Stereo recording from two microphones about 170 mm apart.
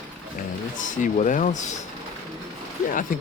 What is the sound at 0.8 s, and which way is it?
Speech, 50° left (ahead or behind).